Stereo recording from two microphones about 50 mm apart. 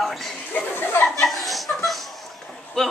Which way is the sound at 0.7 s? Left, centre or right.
Left.